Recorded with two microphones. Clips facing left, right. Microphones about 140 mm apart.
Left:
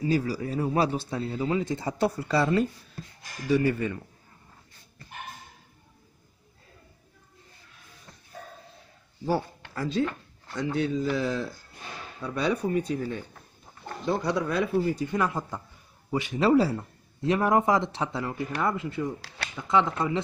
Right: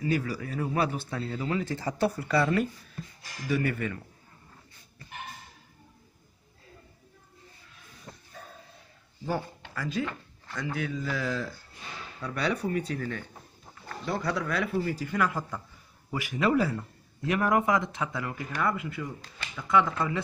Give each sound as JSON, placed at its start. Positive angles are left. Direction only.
{"t": 0.0, "sound": "a man's voice", "side_deg": 25}
{"t": 3.4, "sound": "a man's voice", "side_deg": 25}
{"t": 9.2, "sound": "a man's voice", "side_deg": 30}
{"t": 19.2, "sound": "a sound", "side_deg": 75}
{"t": 19.5, "sound": "a man's voice", "side_deg": 25}